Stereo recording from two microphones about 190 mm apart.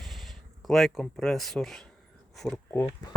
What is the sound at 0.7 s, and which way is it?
Speech, centre (ahead or behind).